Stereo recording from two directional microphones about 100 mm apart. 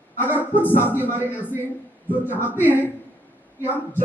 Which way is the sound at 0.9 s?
20° right (ahead or behind).